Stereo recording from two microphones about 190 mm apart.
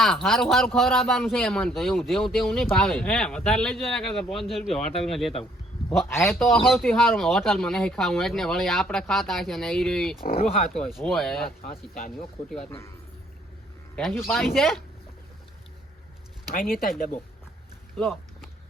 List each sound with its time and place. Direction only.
0.0 s speech: centre (ahead or behind)
6.1 s a man's voice: 15° left (ahead or behind)
6.7 s speech: centre (ahead or behind)
11.7 s speech: 45° left (ahead or behind)
13.9 s speech: centre (ahead or behind)
16.6 s speech: 50° left (ahead or behind)
17.9 s speech: centre (ahead or behind)